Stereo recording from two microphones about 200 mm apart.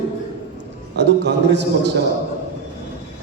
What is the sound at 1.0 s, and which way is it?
Speech, 60° right (ahead or behind).